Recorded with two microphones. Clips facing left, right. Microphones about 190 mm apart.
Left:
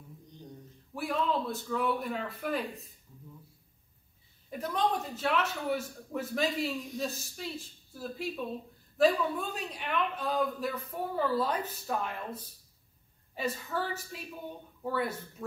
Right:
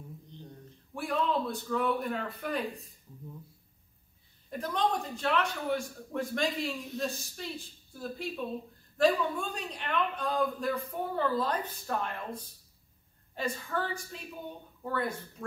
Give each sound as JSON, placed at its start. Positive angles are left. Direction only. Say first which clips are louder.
{"t": 0.9, "sound": "a man's voice", "louder": "right 1 dB", "side_deg": 0}
{"t": 4.5, "sound": "a man's voice", "louder": "even", "side_deg": 5}